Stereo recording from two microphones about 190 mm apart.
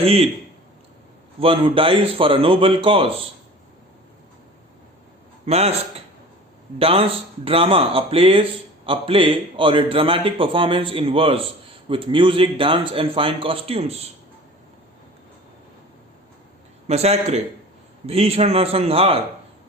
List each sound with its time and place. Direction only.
0.0 s a man's voice: 30° right (ahead or behind)
1.4 s a man's voice: 30° right (ahead or behind)
5.5 s a man's voice: 35° right (ahead or behind)
6.7 s a man's voice: 30° right (ahead or behind)
16.8 s a man's voice: 35° right (ahead or behind)